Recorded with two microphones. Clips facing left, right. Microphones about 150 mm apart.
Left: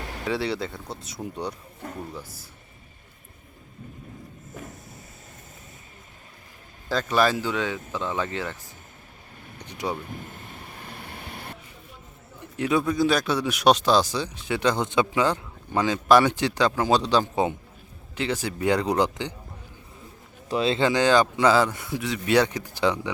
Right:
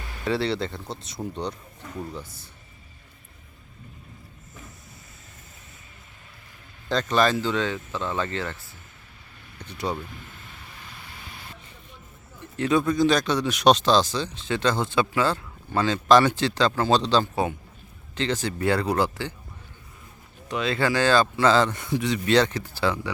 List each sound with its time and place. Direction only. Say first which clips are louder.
0.0 s music: left 5 dB; 65° left (ahead or behind)
0.3 s speech: right 2 dB; centre (ahead or behind)
6.8 s speech: even; 5° left (ahead or behind)
9.6 s vehicle: even; 15° left (ahead or behind)
10.1 s vehicle: left 6 dB; 45° left (ahead or behind)
12.5 s speech: right 1 dB; 10° left (ahead or behind)
20.5 s speech: left 2 dB; 30° left (ahead or behind)